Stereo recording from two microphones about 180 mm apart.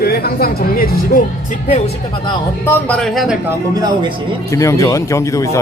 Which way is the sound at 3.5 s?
20° right (ahead or behind).